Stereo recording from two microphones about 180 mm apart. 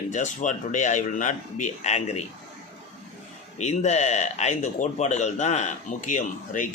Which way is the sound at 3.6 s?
40° left (ahead or behind).